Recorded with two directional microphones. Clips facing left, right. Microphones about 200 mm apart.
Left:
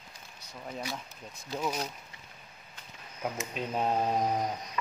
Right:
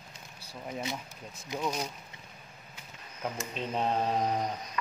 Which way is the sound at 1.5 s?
15° right (ahead or behind).